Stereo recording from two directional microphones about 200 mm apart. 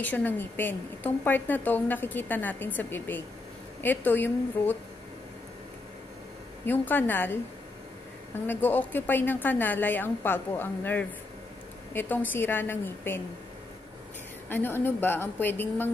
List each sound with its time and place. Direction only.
0.0 s a woman's voice: 10° left (ahead or behind)
6.6 s a woman's voice: 10° left (ahead or behind)
8.5 s a woman's voice: 10° left (ahead or behind)
14.5 s a woman's voice: 10° left (ahead or behind)